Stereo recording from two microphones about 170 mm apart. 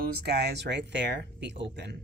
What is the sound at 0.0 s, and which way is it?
Speech, 65° right (ahead or behind).